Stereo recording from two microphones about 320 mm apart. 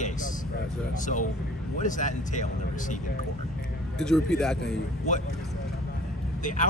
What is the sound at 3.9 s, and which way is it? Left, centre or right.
Speech, centre.